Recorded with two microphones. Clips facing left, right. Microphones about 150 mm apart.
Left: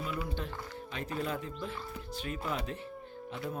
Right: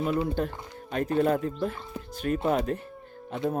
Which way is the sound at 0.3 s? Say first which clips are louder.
Right 8 dB; 50° right (ahead or behind).